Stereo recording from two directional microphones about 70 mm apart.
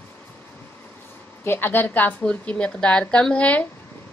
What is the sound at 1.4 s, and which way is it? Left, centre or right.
A woman's voice, left.